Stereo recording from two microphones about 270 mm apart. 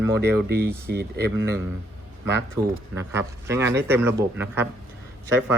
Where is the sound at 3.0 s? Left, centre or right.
Centre.